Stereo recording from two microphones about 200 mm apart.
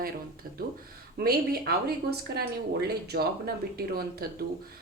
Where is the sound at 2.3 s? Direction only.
55° right (ahead or behind).